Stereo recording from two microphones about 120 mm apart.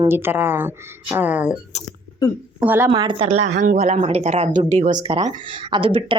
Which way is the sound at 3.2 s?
70° right (ahead or behind).